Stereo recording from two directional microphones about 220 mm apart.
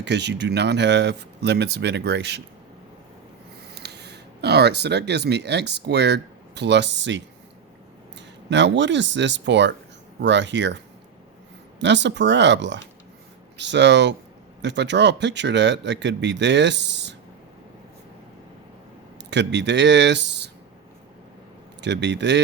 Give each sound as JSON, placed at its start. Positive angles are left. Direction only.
{"t": 0.0, "sound": "speech", "side_deg": -50}
{"t": 3.8, "sound": "speech", "side_deg": -50}
{"t": 8.4, "sound": "speech", "side_deg": -55}
{"t": 11.8, "sound": "speech", "side_deg": -55}
{"t": 19.3, "sound": "speech", "side_deg": -50}
{"t": 21.8, "sound": "speech", "side_deg": -50}